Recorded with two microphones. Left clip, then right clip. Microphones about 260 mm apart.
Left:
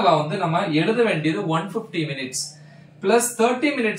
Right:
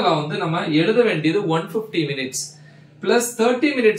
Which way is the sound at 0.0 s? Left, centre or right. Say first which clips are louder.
Left 1 dB; centre.